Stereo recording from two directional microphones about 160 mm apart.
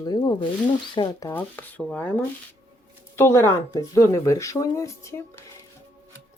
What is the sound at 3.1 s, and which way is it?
Speech, 15° left (ahead or behind).